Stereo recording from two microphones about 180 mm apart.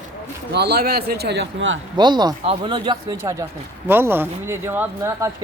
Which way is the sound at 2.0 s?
25° right (ahead or behind).